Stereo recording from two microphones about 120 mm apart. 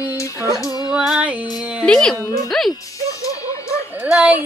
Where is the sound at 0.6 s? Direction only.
30° left (ahead or behind).